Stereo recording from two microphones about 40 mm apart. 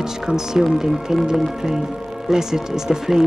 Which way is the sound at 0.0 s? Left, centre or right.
Centre.